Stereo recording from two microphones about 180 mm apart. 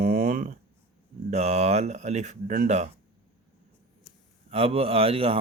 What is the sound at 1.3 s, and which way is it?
Speech, 40° right (ahead or behind).